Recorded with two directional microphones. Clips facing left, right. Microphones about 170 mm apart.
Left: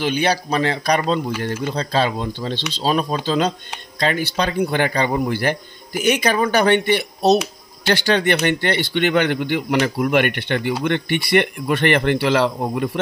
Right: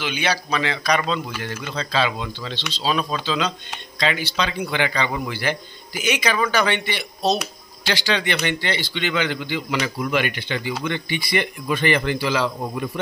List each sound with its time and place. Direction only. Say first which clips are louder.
0.0 s speech: left 5 dB; 45° left (ahead or behind); by 12.5 s 65° left (ahead or behind)